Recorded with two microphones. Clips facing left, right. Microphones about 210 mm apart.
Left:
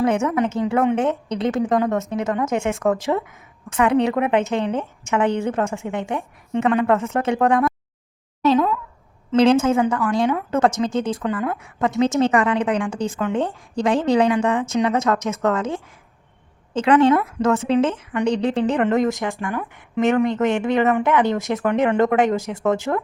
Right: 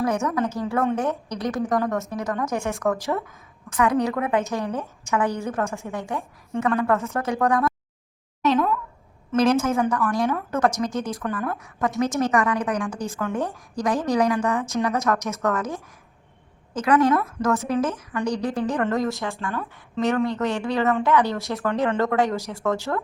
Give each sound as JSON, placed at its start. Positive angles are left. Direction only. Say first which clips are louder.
{"t": 0.2, "sound": "a woman's voice", "louder": "left 4 dB", "side_deg": 20}
{"t": 8.5, "sound": "a woman's voice", "louder": "left 3 dB", "side_deg": 20}